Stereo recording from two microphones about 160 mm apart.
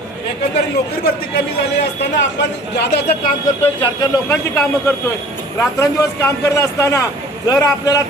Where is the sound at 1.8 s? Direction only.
90° left.